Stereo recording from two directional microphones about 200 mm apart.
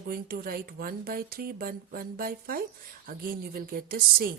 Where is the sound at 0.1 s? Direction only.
45° right (ahead or behind).